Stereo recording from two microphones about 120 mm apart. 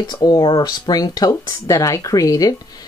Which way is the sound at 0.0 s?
35° left (ahead or behind).